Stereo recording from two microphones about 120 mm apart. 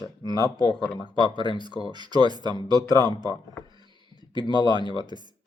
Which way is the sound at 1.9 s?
40° right (ahead or behind).